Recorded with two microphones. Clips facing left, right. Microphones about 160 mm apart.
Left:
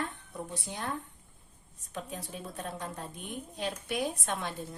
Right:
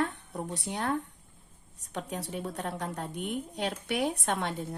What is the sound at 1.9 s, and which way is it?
A woman's voice, 75° right (ahead or behind).